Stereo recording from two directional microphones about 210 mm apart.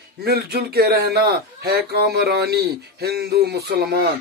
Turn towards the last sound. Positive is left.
turn(degrees=-50)  # may be behind; listen again after turning